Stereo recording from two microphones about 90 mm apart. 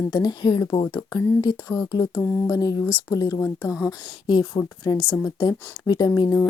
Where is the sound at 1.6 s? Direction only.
35° left (ahead or behind).